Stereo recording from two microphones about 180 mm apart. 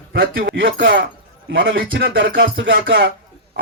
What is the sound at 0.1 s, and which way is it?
Speech, 65° right (ahead or behind).